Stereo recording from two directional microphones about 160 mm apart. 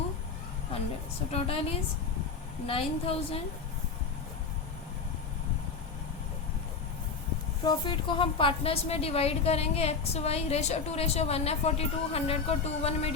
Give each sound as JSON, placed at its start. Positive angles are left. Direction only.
{"t": 1.3, "sound": "a woman's voice", "side_deg": 40}
{"t": 7.6, "sound": "a woman's voice", "side_deg": 30}